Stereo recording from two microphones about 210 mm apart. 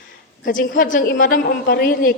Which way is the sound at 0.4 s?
40° left (ahead or behind).